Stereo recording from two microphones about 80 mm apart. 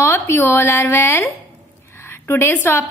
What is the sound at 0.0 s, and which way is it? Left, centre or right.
A woman's voice, left.